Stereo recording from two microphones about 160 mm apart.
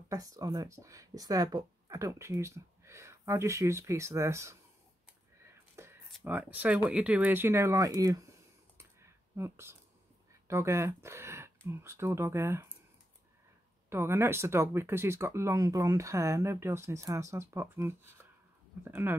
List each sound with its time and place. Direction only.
0.1 s speech: 20° right (ahead or behind)
5.5 s a sound: 15° right (ahead or behind)
6.2 s speech: 10° right (ahead or behind)
9.3 s speech: 15° right (ahead or behind)
13.8 s speech: 15° right (ahead or behind)